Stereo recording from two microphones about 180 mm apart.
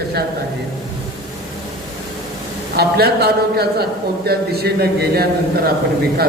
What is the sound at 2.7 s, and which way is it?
A man's voice, 60° right (ahead or behind).